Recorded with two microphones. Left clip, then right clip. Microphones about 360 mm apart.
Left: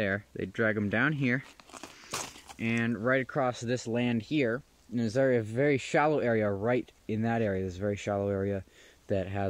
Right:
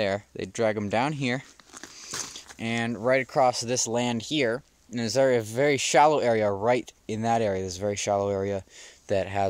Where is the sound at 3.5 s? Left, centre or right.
Right.